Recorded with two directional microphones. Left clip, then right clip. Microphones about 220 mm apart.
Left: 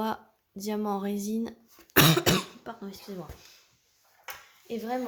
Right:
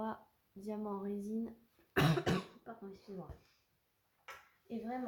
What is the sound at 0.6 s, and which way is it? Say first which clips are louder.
Speech: left 11 dB; 40° left (ahead or behind).